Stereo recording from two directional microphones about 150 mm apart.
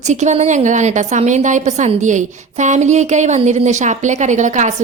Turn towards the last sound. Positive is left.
turn(degrees=-55)  # may be behind; listen again after turning